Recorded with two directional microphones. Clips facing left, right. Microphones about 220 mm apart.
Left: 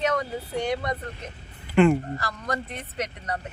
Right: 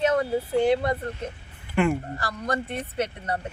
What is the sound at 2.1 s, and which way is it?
Speech, 30° right (ahead or behind).